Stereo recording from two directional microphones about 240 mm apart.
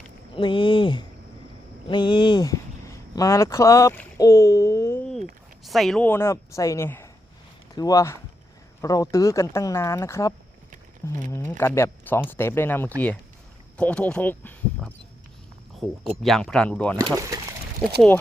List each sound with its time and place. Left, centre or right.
0.3 s speech: left
1.9 s a sound: centre
5.6 s speech: centre
17.0 s speech: centre